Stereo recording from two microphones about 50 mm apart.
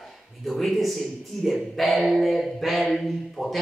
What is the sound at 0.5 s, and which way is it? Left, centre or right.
Speech, centre.